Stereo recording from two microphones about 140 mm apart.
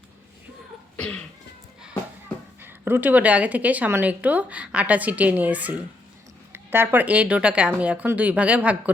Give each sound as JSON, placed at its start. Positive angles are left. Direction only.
{"t": 0.9, "sound": "cat", "side_deg": 10}
{"t": 2.6, "sound": "a woman's voice", "side_deg": -15}